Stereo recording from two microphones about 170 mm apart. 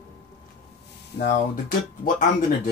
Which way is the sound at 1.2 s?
65° left (ahead or behind).